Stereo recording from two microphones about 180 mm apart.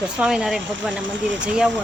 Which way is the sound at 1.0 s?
90° right.